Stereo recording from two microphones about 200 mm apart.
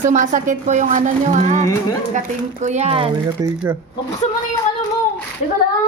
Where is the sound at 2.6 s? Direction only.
35° right (ahead or behind).